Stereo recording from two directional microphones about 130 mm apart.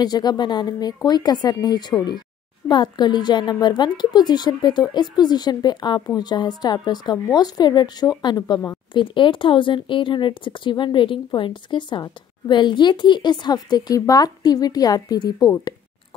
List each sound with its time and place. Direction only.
0.0 s a woman's voice: 30° left (ahead or behind)